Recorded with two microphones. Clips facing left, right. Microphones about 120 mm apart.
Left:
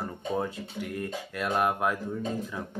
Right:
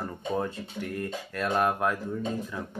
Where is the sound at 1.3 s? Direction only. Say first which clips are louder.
Right 1 dB; 15° left (ahead or behind).